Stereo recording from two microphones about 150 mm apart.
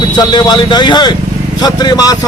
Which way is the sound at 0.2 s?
30° left (ahead or behind).